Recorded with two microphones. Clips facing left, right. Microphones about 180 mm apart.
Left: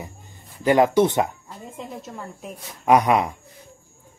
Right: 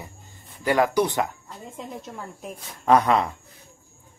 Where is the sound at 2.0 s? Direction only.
Centre (ahead or behind).